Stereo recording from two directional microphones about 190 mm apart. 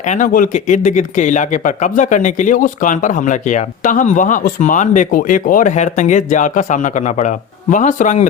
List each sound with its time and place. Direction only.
0.0 s speech: 40° left (ahead or behind)